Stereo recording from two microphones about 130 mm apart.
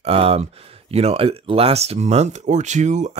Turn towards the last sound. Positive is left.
turn(degrees=-65)  # may be behind; listen again after turning